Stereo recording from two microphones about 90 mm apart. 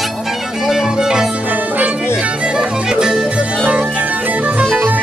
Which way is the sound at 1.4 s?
20° right (ahead or behind).